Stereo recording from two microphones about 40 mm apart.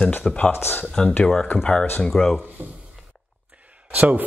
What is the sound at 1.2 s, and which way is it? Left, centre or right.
Speech, centre.